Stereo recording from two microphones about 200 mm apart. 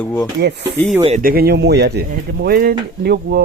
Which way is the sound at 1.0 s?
40° right (ahead or behind).